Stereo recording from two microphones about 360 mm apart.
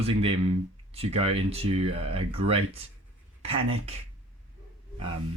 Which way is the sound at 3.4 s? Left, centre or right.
Centre.